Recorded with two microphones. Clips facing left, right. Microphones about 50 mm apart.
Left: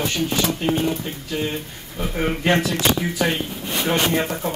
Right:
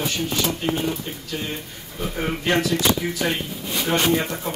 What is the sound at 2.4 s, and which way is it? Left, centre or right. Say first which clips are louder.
Speech: left 2 dB; centre.